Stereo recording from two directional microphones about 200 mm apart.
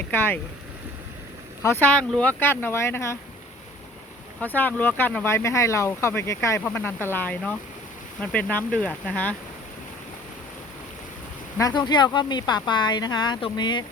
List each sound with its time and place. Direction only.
0.1 s speech: 10° left (ahead or behind)
1.6 s speech: 10° left (ahead or behind)
4.4 s speech: 10° left (ahead or behind)
11.5 s speech: 20° left (ahead or behind)